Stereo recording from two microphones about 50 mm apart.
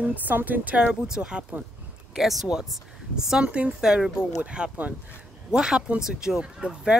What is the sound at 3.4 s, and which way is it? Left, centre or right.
Speech, right.